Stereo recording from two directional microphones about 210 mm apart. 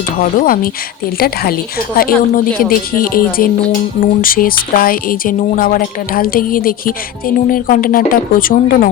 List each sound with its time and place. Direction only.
0.2 s speech: 40° left (ahead or behind)